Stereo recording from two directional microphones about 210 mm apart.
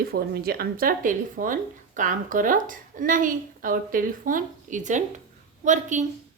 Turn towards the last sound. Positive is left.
turn(degrees=-35)  # may be behind; listen again after turning